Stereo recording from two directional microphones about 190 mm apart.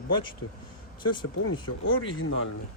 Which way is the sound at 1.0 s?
25° left (ahead or behind).